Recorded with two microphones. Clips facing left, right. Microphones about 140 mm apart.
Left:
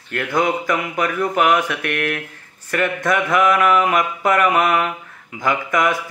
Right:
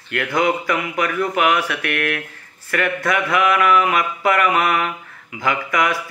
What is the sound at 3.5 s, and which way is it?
Mantra, 25° left (ahead or behind).